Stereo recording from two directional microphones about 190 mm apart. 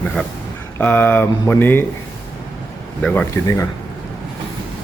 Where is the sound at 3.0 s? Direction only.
5° left (ahead or behind).